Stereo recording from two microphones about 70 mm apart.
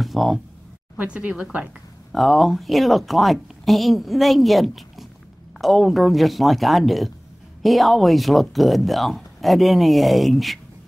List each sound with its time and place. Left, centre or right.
0.0 s a sound: centre
0.9 s speech: centre
2.1 s speech: centre